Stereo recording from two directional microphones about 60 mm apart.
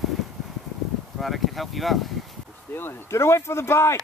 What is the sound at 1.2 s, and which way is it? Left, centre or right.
Speech, centre.